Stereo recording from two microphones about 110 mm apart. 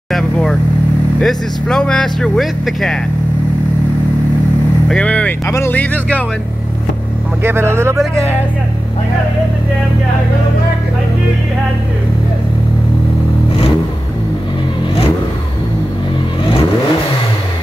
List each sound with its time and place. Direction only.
0.1 s speech: 5° left (ahead or behind)
4.8 s speech: 10° left (ahead or behind)
7.4 s speech: 20° right (ahead or behind)